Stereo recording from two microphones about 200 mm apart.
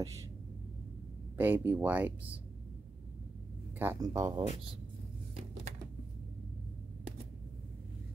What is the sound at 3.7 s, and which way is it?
Speech, 15° right (ahead or behind).